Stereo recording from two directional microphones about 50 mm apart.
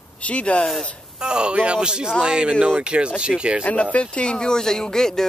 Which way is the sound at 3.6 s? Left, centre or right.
Left.